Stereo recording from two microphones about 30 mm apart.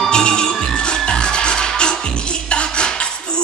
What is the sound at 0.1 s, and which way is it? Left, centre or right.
Music, left.